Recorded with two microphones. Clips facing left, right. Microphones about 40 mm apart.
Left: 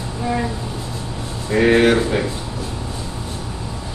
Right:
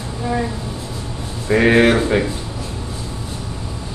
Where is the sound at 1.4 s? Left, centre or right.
Centre.